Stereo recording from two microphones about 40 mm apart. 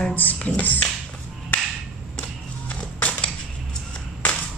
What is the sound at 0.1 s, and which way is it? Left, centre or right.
Speech, left.